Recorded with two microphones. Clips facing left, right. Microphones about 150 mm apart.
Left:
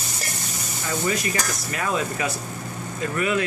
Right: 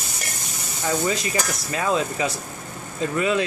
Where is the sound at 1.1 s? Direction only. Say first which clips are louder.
Right 1 dB; 25° right (ahead or behind).